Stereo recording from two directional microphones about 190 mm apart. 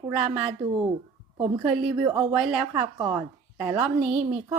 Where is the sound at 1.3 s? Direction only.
30° right (ahead or behind).